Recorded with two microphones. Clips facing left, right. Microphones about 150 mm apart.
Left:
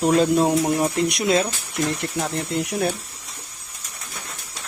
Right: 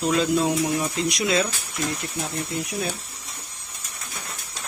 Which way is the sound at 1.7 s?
65° left (ahead or behind).